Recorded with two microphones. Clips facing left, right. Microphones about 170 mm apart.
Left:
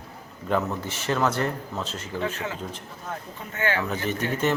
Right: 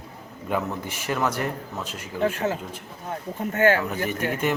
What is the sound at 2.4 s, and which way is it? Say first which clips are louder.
Speech: right 6 dB; 35° right (ahead or behind).